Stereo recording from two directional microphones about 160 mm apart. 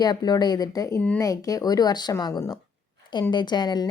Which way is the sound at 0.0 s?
25° left (ahead or behind).